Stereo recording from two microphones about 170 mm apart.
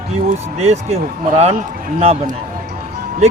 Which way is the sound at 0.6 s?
40° right (ahead or behind).